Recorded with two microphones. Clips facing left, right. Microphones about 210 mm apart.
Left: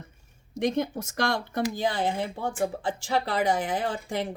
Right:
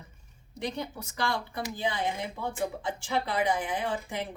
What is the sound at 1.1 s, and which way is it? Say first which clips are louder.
Speech: left 4 dB; 75° left (ahead or behind).